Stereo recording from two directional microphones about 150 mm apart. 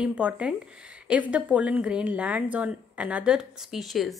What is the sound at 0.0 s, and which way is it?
A woman's voice, 10° right (ahead or behind).